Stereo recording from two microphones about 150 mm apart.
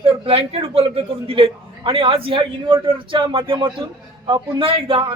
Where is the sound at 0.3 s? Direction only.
40° right (ahead or behind).